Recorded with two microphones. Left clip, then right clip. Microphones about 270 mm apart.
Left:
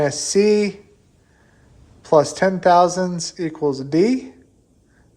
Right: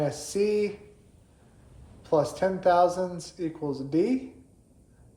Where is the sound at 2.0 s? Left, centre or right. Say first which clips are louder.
Left 9 dB; left.